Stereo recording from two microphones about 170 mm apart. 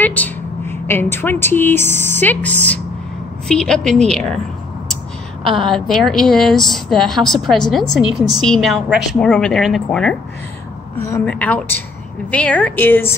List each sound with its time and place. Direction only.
0.0 s a woman's voice: 10° left (ahead or behind)
5.4 s a woman's voice: 30° right (ahead or behind)
5.7 s a woman's voice: 5° left (ahead or behind)
11.2 s a woman's voice: 10° left (ahead or behind)